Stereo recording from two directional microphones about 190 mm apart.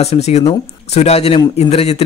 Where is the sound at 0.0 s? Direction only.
35° left (ahead or behind).